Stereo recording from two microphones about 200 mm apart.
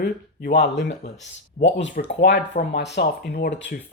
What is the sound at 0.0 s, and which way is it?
Speech, 55° left (ahead or behind).